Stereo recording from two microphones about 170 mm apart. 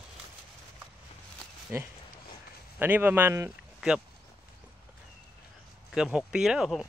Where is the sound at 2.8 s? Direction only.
10° right (ahead or behind).